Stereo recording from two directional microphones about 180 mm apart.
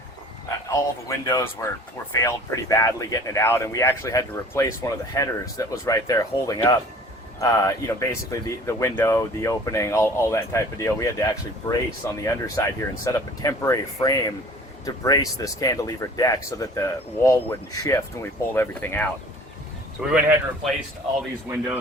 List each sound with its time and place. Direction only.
0.7 s speech: 15° left (ahead or behind)
20.0 s speech: 5° right (ahead or behind)